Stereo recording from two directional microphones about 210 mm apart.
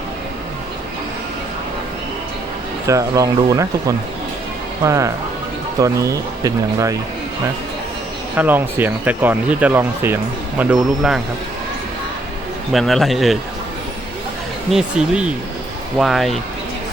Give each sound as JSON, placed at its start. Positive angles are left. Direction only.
{"t": 2.8, "sound": "speech", "side_deg": -15}
{"t": 8.4, "sound": "speech", "side_deg": -10}
{"t": 12.7, "sound": "speech", "side_deg": 0}
{"t": 14.7, "sound": "speech", "side_deg": -5}